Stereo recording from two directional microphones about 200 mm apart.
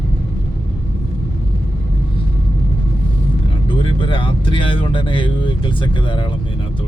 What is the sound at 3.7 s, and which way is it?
Vehicle, 25° left (ahead or behind).